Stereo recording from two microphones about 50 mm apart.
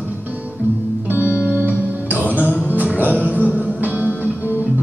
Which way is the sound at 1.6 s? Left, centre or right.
Right.